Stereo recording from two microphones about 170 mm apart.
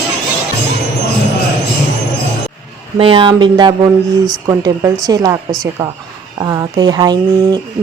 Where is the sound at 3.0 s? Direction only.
30° right (ahead or behind).